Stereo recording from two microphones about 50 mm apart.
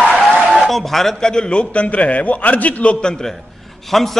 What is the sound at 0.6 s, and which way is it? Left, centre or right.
A man's voice, centre.